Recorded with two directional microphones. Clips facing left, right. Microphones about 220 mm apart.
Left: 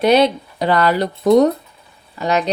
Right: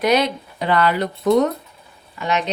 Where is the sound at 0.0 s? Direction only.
30° left (ahead or behind).